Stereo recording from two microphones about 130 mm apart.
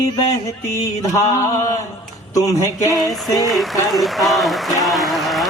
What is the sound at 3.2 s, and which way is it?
Speech, 30° left (ahead or behind).